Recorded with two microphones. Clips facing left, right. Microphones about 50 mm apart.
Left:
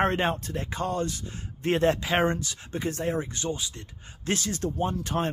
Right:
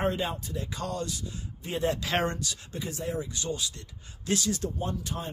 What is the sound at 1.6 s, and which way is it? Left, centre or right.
Speech, left.